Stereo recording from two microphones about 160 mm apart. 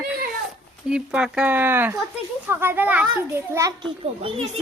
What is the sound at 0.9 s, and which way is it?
A child's voice, 5° right (ahead or behind).